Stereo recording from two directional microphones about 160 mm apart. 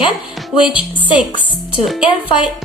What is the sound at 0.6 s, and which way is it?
A woman's voice, 10° right (ahead or behind).